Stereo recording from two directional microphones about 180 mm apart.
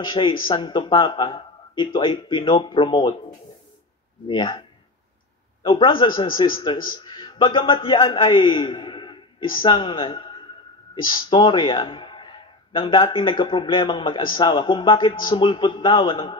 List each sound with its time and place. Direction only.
0.0 s a man's voice: 25° left (ahead or behind)
4.3 s a man's voice: 25° left (ahead or behind)